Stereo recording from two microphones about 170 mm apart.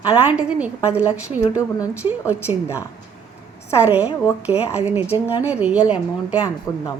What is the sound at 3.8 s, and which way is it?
Speech, 10° right (ahead or behind).